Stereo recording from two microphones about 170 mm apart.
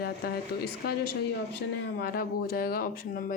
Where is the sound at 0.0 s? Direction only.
65° left (ahead or behind).